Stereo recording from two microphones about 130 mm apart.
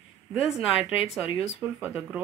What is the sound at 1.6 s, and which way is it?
Speech, 15° right (ahead or behind).